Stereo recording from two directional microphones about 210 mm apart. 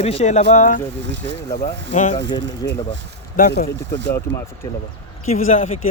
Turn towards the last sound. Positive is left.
turn(degrees=30)  # may be behind; listen again after turning